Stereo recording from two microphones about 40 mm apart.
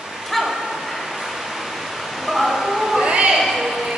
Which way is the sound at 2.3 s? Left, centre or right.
Centre.